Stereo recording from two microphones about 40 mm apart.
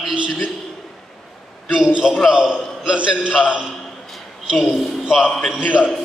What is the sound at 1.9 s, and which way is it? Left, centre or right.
A man's voice, right.